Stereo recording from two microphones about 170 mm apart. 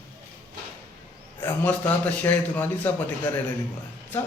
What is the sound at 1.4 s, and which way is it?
A man's voice, 10° left (ahead or behind).